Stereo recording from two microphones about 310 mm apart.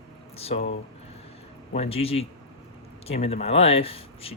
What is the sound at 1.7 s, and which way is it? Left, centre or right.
Speech, centre.